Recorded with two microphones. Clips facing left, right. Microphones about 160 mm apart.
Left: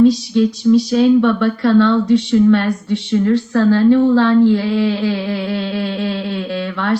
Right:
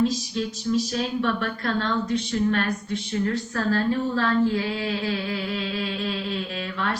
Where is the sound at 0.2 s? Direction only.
75° left (ahead or behind).